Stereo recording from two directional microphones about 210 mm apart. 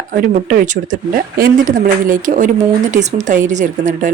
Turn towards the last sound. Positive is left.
turn(degrees=-35)  # may be behind; listen again after turning